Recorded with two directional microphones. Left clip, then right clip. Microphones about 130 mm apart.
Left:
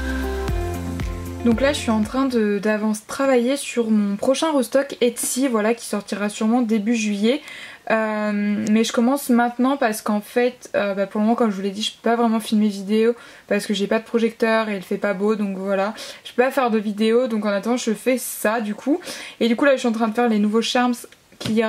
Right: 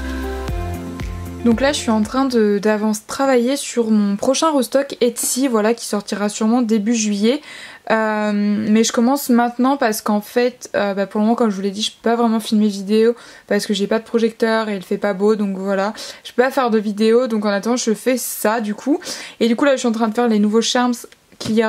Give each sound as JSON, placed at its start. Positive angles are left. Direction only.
{"t": 1.4, "sound": "speech", "side_deg": -25}